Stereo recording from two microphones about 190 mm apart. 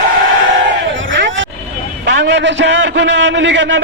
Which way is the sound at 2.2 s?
70° right (ahead or behind).